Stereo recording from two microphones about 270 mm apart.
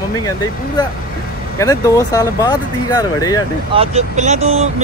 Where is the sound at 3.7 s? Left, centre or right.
Right.